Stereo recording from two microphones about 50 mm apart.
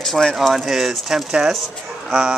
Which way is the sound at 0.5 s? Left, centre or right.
Centre.